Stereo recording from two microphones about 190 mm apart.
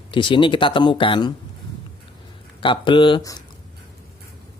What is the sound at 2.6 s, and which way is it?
Speech, 25° left (ahead or behind).